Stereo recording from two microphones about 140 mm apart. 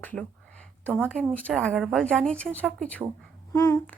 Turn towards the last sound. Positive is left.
turn(degrees=20)  # may be behind; listen again after turning